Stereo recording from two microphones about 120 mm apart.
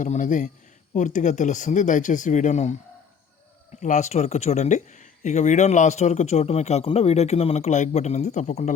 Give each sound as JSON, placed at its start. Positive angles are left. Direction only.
{"t": 0.0, "sound": "speech", "side_deg": 90}
{"t": 3.8, "sound": "speech", "side_deg": 85}